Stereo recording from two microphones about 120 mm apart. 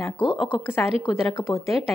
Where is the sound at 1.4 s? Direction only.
25° left (ahead or behind).